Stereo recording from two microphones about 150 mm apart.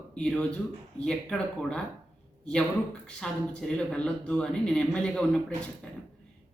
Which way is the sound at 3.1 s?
5° left (ahead or behind).